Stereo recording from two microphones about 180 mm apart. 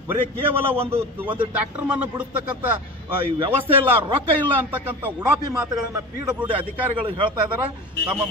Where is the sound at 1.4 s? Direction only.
10° right (ahead or behind).